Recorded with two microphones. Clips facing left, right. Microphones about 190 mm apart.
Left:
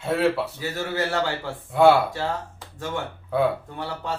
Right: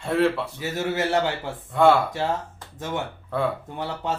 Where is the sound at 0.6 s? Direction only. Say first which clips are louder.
Right 5 dB; 20° right (ahead or behind).